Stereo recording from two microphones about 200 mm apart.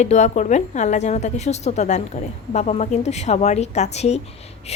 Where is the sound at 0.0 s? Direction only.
35° left (ahead or behind).